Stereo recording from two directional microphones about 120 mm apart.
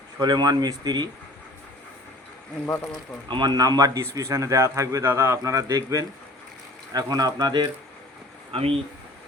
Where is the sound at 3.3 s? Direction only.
35° right (ahead or behind).